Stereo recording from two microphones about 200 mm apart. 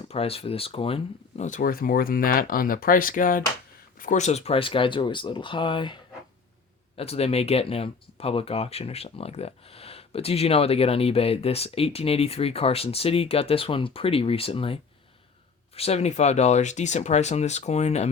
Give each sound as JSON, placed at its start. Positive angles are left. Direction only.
{"t": 0.1, "sound": "speech", "side_deg": 30}